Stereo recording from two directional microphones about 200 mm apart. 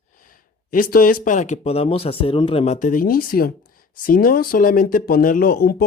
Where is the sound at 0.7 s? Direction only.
45° left (ahead or behind).